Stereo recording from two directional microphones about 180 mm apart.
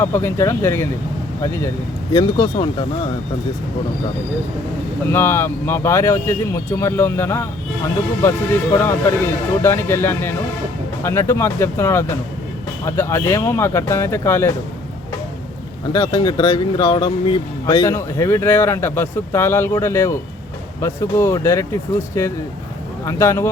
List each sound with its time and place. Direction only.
0.0 s speech: 10° left (ahead or behind)
2.1 s speech: 25° left (ahead or behind)
5.1 s speech: 15° left (ahead or behind)
15.9 s speech: 25° left (ahead or behind)
17.8 s speech: 15° left (ahead or behind)